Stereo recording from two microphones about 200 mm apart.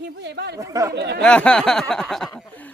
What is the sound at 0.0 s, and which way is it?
Speech, 55° right (ahead or behind).